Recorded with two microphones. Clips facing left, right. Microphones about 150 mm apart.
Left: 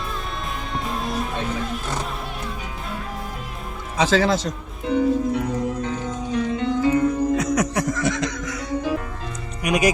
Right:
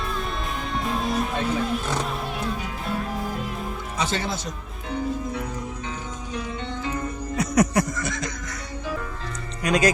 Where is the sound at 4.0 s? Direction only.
90° left.